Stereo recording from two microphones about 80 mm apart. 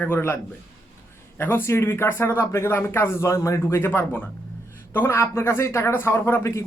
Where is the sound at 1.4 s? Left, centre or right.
Left.